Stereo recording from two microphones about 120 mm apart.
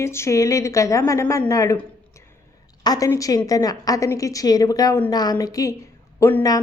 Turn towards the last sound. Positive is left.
turn(degrees=20)  # may be behind; listen again after turning